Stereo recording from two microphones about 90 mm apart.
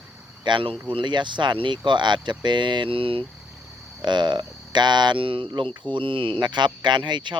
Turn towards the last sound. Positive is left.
turn(degrees=-60)  # may be behind; listen again after turning